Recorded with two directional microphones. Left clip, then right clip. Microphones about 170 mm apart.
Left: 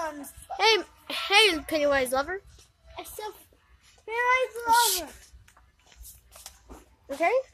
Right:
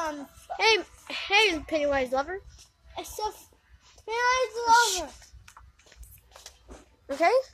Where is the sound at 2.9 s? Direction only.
40° right (ahead or behind).